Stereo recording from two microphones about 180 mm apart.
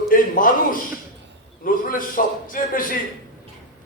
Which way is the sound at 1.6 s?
50° left (ahead or behind).